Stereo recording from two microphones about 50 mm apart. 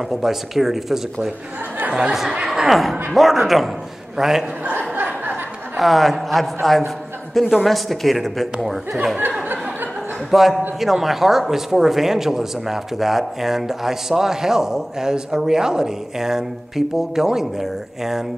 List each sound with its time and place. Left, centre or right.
0.1 s speech: centre
1.9 s speech: right
4.7 s a sound: right
5.8 s speech: centre
10.3 s speech: centre